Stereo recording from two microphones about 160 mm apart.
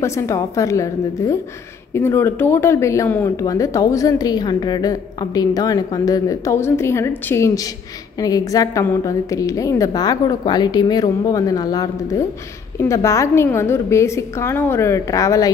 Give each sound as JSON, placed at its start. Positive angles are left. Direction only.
{"t": 0.0, "sound": "a woman's voice", "side_deg": 20}